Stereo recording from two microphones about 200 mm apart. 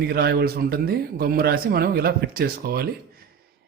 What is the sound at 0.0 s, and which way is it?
Speech, 50° right (ahead or behind).